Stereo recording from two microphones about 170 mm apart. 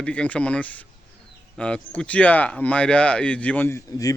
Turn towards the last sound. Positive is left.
turn(degrees=15)  # may be behind; listen again after turning